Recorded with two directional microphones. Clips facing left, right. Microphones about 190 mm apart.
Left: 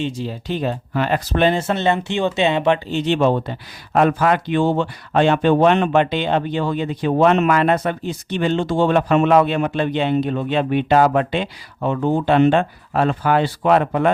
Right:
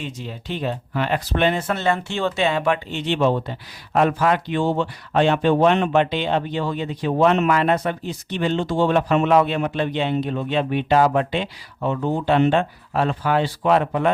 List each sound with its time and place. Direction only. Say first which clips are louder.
0.0 s speech: left 7 dB; 35° left (ahead or behind); by 14.1 s 55° left (ahead or behind)